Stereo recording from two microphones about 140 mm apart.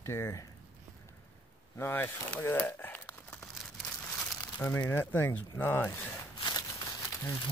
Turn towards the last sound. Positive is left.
turn(degrees=20)  # may be behind; listen again after turning